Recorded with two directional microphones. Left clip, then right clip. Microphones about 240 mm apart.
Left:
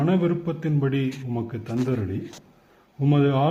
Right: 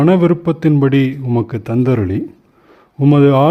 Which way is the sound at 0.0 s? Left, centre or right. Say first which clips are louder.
Right 11 dB; right.